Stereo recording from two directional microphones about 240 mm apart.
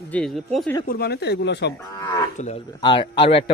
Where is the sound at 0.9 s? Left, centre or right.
Left.